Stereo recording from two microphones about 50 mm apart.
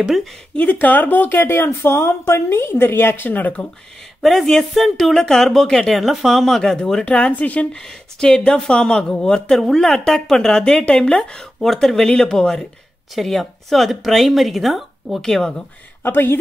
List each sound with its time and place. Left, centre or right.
0.7 s speech: left
1.3 s a woman's voice: left
4.2 s speech: centre
6.6 s speech: centre; by 7.6 s left
8.2 s speech: centre
15.2 s speech: centre
16.0 s speech: left